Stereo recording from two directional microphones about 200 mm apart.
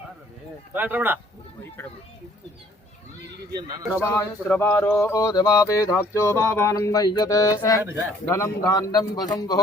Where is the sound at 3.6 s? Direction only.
20° right (ahead or behind).